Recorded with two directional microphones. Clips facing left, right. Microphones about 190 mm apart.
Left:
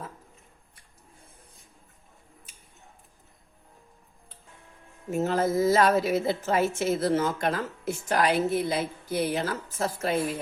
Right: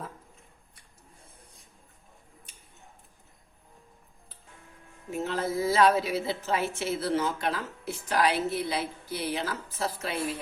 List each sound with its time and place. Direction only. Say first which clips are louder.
5.1 s a woman's voice: left 5 dB; 45° left (ahead or behind)